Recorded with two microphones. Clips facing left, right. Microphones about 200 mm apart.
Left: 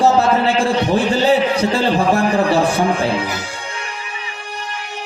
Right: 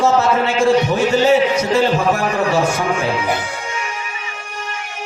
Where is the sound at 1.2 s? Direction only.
35° left (ahead or behind).